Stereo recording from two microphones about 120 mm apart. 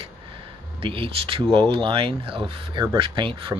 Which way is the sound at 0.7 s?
45° right (ahead or behind).